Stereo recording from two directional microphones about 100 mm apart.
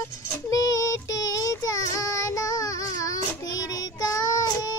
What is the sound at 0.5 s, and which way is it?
Child singing, 35° left (ahead or behind).